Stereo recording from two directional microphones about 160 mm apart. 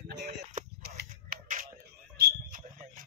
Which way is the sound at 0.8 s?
75° right (ahead or behind).